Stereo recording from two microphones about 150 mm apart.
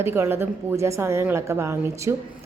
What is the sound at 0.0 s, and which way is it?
A woman's voice, 15° right (ahead or behind).